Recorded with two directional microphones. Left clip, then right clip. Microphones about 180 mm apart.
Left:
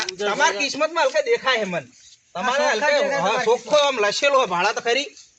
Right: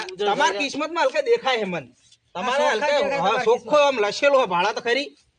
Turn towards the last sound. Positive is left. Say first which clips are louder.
# left 1 dB
turn(degrees=-35)  # may be behind; listen again after turning